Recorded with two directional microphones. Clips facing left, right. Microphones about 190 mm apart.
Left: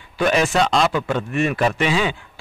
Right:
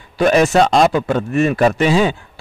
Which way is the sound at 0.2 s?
40° right (ahead or behind).